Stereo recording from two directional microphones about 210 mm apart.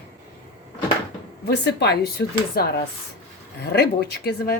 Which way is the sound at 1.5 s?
50° left (ahead or behind).